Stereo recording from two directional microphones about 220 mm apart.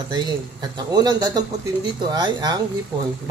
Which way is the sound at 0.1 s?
20° right (ahead or behind).